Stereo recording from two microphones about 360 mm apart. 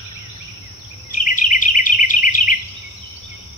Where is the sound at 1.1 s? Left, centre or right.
Left.